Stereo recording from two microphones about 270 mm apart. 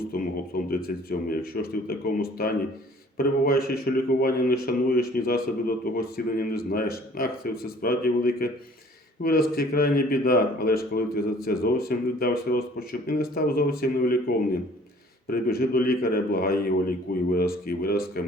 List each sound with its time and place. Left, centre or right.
0.1 s a man's voice: left